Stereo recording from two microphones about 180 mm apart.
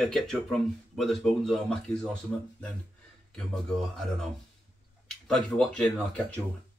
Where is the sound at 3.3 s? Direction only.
5° left (ahead or behind).